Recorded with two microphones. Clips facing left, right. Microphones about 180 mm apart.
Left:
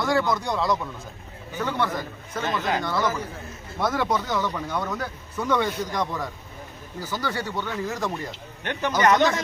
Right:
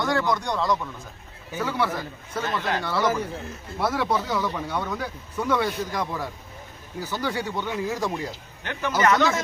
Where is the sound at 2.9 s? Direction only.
10° right (ahead or behind).